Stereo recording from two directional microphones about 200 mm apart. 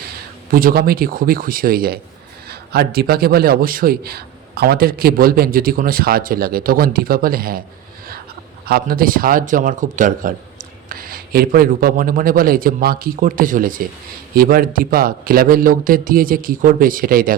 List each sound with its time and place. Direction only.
0.5 s a man's voice: 50° right (ahead or behind)
8.6 s a man's voice: 50° right (ahead or behind)